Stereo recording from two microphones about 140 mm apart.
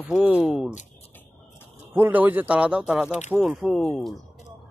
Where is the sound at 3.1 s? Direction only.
55° left (ahead or behind).